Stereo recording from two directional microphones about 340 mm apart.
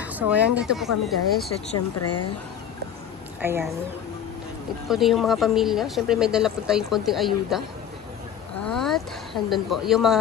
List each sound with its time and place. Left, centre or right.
0.0 s speech: centre
2.0 s speech: left
3.3 s speech: centre
4.8 s speech: centre
8.6 s speech: centre